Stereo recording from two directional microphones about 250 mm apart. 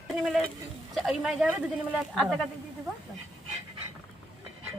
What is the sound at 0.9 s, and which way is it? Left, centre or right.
Speech, centre.